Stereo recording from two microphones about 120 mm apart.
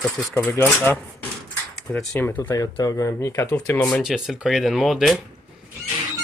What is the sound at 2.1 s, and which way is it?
Speech, 20° left (ahead or behind).